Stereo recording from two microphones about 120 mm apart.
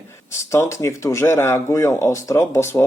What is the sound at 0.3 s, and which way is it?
Speech, 25° left (ahead or behind).